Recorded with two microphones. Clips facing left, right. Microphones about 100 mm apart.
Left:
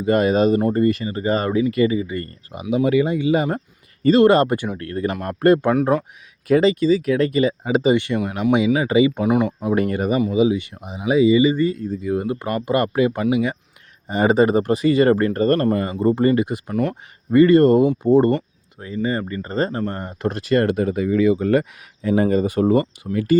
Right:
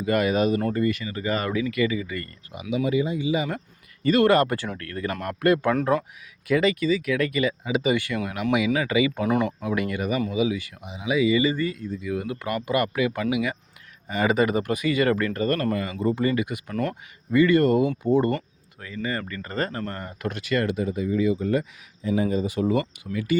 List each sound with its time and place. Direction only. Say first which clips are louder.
0.0 s speech: left 5 dB; 30° left (ahead or behind)
2.9 s speech: left 6 dB; 65° left (ahead or behind); by 3.6 s 45° left (ahead or behind)
4.0 s speech: left 5 dB; 25° left (ahead or behind)
4.9 s speech: left 5 dB; 25° left (ahead or behind)
9.2 s speech: left 5 dB; 10° left (ahead or behind)
9.7 s speech: left 7 dB; 35° left (ahead or behind)
10.8 s speech: left 6 dB; 40° left (ahead or behind); by 11.7 s 20° left (ahead or behind)
11.7 s speech: left 6 dB; 40° left (ahead or behind)
19.0 s speech: left 6 dB; 25° left (ahead or behind)
20.7 s speech: left 6 dB; 60° left (ahead or behind); by 23.4 s 40° left (ahead or behind)